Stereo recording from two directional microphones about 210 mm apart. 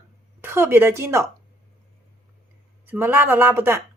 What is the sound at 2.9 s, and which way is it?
Speech, 10° right (ahead or behind).